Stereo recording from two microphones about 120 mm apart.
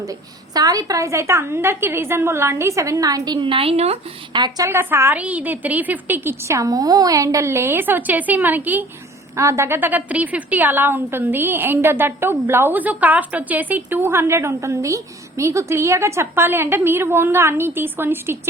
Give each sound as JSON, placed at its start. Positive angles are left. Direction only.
{"t": 0.0, "sound": "a woman's voice", "side_deg": -30}
{"t": 3.4, "sound": "speech", "side_deg": -50}
{"t": 4.3, "sound": "a woman's voice", "side_deg": -35}
{"t": 4.7, "sound": "a woman's voice", "side_deg": -20}
{"t": 9.3, "sound": "a woman's voice", "side_deg": -25}